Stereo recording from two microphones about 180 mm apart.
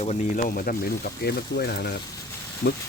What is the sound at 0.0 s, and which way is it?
Speech, 40° left (ahead or behind).